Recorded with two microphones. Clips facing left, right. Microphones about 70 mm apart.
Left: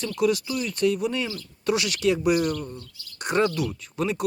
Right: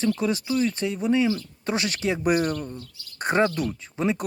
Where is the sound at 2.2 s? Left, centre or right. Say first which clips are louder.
Even; right.